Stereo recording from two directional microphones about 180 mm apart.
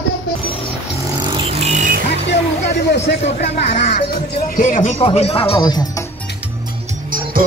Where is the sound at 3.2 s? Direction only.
35° left (ahead or behind).